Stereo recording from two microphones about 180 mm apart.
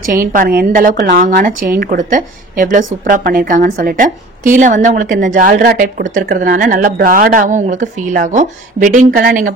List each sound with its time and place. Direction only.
0.1 s a woman's voice: 50° right (ahead or behind)